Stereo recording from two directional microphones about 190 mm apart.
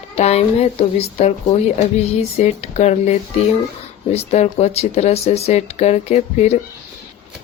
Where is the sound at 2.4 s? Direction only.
35° left (ahead or behind).